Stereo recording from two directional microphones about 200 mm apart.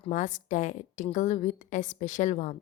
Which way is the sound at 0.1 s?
40° left (ahead or behind).